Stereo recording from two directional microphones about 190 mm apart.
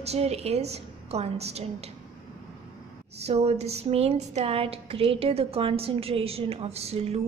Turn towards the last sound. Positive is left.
turn(degrees=-35)  # may be behind; listen again after turning